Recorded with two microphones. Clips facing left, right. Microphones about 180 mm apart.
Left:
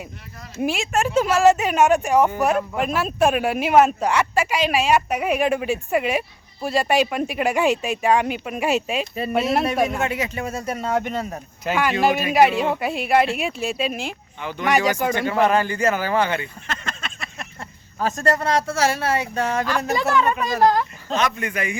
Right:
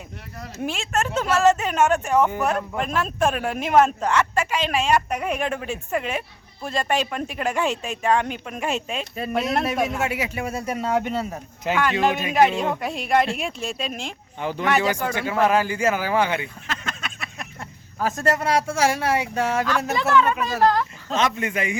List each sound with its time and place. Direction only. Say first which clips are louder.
0.6 s speech: left 4 dB; 10° left (ahead or behind); by 11.3 s 5° right (ahead or behind)
11.7 s speech: left 1 dB; 10° left (ahead or behind)
15.1 s speech: even; 5° right (ahead or behind)
16.6 s speech: even; centre (ahead or behind)
19.6 s speech: left 1 dB; 10° left (ahead or behind)
21.2 s a man's voice: right 1 dB; 25° right (ahead or behind)